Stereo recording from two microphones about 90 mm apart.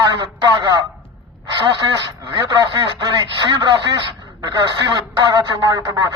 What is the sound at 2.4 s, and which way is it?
Speech, 50° right (ahead or behind).